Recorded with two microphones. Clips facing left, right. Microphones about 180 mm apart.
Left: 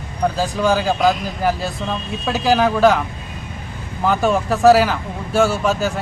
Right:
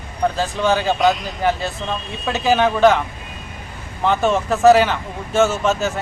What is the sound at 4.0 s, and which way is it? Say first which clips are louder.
Speech: even; centre (ahead or behind).